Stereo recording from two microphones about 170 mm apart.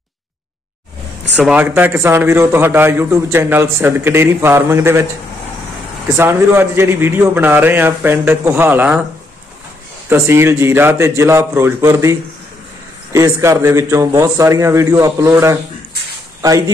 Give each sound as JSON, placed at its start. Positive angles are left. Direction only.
{"t": 1.4, "sound": "a man's voice", "side_deg": -10}
{"t": 6.1, "sound": "a man's voice", "side_deg": -15}
{"t": 10.0, "sound": "a man's voice", "side_deg": -15}